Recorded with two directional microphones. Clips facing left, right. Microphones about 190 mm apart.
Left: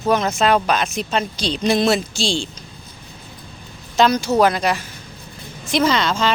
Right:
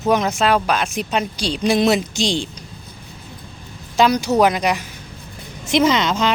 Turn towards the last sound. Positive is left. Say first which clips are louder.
# right 1 dB
turn(degrees=-20)  # may be behind; listen again after turning